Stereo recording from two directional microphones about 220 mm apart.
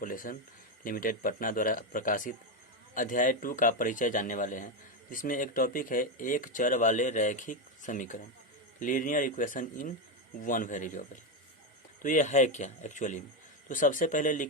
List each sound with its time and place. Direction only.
0.0 s speech: 40° left (ahead or behind)